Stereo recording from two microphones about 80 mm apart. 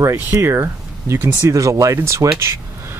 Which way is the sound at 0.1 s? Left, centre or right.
Right.